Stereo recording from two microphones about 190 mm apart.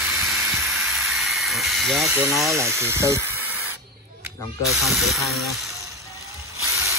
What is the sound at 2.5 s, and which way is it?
Speech, 15° right (ahead or behind).